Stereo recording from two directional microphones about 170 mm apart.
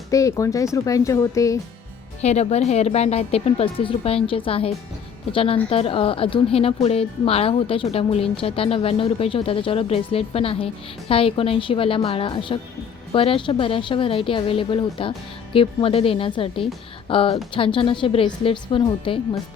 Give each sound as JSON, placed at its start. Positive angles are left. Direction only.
{"t": 0.1, "sound": "speech", "side_deg": 20}
{"t": 2.2, "sound": "a woman's voice", "side_deg": 40}